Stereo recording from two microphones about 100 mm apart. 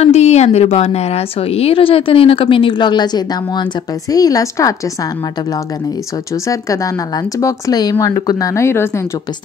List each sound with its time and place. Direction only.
0.0 s a woman's voice: 90° left; by 4.7 s 35° left (ahead or behind)
6.4 s speech: 35° left (ahead or behind)